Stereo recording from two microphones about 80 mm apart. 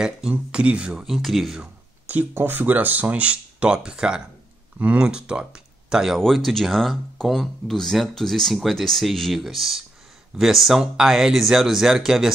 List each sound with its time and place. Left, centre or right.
0.3 s speech: centre
2.0 s speech: right; by 12.3 s centre